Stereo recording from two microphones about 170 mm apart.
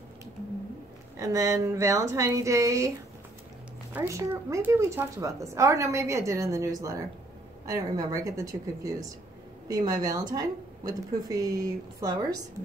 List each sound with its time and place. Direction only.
1.1 s a woman's voice: 20° right (ahead or behind)
3.9 s a woman's voice: 15° right (ahead or behind)
9.7 s a woman's voice: 20° right (ahead or behind)